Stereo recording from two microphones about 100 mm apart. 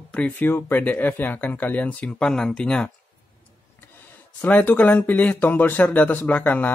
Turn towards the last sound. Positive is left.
turn(degrees=15)  # may be behind; listen again after turning